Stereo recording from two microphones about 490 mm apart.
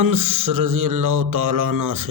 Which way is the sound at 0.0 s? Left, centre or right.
Right.